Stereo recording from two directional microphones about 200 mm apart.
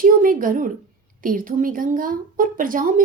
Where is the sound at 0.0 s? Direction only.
45° right (ahead or behind).